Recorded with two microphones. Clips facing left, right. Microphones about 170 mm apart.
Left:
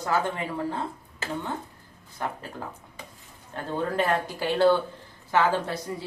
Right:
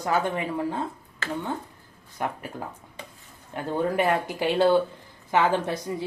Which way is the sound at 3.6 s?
15° right (ahead or behind).